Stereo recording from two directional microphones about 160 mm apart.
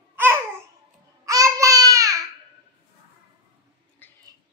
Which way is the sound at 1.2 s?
20° right (ahead or behind).